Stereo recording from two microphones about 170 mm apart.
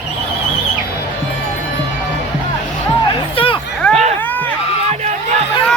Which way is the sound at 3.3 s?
30° left (ahead or behind).